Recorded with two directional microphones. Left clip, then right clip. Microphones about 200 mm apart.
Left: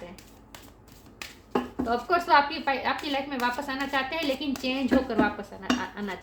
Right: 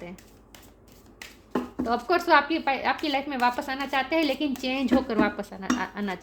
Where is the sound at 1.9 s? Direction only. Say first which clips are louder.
Right 1 dB; 50° right (ahead or behind).